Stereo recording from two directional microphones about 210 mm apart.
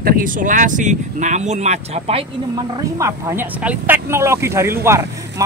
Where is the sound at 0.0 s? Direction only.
40° right (ahead or behind).